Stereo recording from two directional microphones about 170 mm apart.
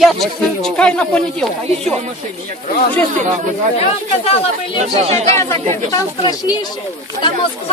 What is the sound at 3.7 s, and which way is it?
Speech, 35° left (ahead or behind).